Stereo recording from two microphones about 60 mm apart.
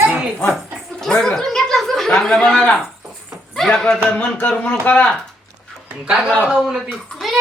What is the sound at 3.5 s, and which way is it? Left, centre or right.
Speech, centre.